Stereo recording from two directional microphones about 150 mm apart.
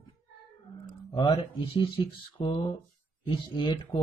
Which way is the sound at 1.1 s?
35° left (ahead or behind).